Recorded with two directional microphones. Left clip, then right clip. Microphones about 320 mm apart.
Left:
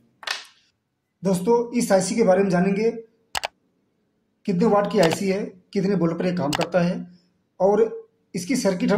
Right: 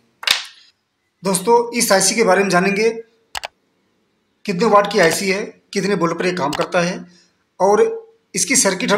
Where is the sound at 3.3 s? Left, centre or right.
Centre.